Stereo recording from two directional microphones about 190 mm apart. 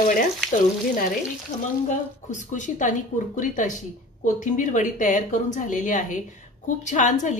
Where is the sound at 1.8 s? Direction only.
40° left (ahead or behind).